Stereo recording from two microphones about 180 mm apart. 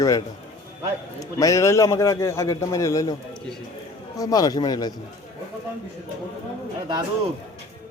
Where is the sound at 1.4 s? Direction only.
15° left (ahead or behind).